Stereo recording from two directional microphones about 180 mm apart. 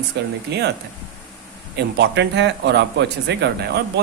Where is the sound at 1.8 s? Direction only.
70° right (ahead or behind).